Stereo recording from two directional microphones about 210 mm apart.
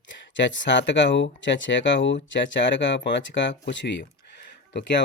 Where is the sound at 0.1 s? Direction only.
60° left (ahead or behind).